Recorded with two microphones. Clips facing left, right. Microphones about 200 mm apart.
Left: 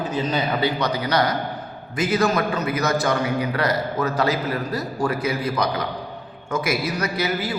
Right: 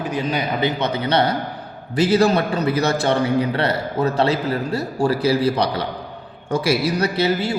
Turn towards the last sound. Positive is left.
turn(degrees=-30)  # may be behind; listen again after turning